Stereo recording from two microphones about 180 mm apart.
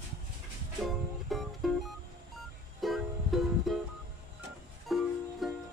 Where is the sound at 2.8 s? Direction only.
Centre (ahead or behind).